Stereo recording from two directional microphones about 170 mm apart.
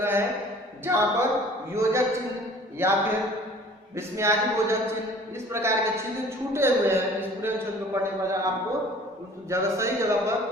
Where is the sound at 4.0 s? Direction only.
15° right (ahead or behind).